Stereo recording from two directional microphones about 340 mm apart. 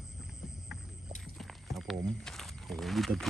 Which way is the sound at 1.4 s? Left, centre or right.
Centre.